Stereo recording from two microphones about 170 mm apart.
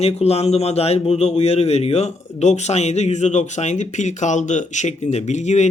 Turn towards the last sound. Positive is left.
turn(degrees=45)  # may be behind; listen again after turning